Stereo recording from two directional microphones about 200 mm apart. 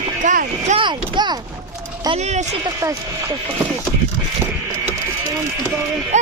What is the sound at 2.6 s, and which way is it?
Speech, 15° right (ahead or behind).